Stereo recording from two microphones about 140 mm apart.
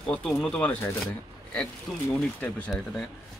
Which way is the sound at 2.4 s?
10° left (ahead or behind).